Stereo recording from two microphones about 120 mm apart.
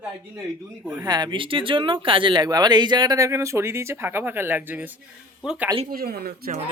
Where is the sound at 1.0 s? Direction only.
35° right (ahead or behind); by 5.8 s 15° right (ahead or behind).